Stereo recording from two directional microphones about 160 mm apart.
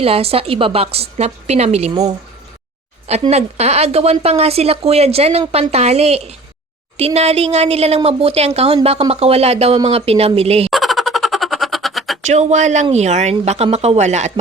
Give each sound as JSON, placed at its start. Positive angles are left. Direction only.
{"t": 0.0, "sound": "speech", "side_deg": -35}
{"t": 3.1, "sound": "speech", "side_deg": -40}
{"t": 10.7, "sound": "a sound", "side_deg": 0}
{"t": 12.2, "sound": "speech", "side_deg": -45}